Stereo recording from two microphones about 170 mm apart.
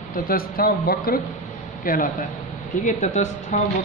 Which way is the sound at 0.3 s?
60° left (ahead or behind).